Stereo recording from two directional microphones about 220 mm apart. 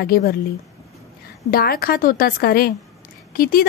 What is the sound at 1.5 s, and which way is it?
A woman's voice, 40° left (ahead or behind).